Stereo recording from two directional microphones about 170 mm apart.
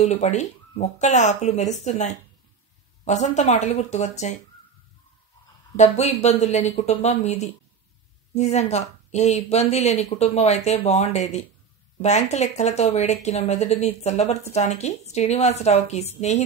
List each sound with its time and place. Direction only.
0.0 s speech: 40° left (ahead or behind)
5.8 s speech: 40° left (ahead or behind)